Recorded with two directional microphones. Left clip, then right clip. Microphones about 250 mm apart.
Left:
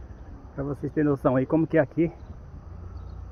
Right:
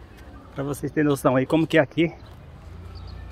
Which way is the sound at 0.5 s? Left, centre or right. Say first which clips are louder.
Right 3 dB; centre.